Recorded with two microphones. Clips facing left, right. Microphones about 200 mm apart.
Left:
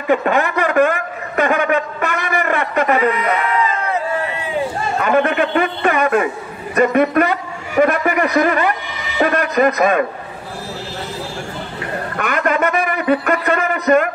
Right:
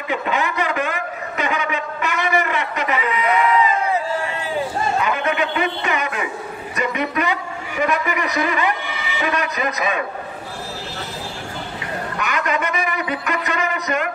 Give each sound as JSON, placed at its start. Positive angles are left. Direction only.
{"t": 0.1, "sound": "a sound", "side_deg": 55}
{"t": 4.9, "sound": "a man's voice", "side_deg": 50}
{"t": 12.2, "sound": "a man's voice", "side_deg": 50}